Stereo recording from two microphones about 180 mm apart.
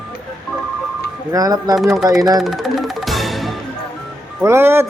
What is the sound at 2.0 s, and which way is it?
Speech, 20° right (ahead or behind).